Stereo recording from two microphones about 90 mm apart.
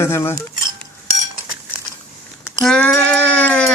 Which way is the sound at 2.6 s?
10° left (ahead or behind).